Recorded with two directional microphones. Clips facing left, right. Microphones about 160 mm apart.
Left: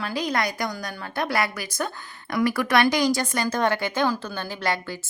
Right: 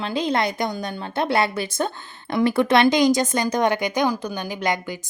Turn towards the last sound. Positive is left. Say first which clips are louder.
# right 3 dB
turn(degrees=-15)  # may be behind; listen again after turning